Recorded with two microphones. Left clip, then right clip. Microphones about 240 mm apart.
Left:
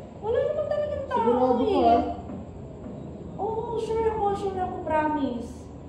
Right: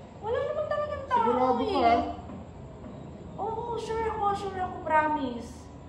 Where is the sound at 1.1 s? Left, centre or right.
Right.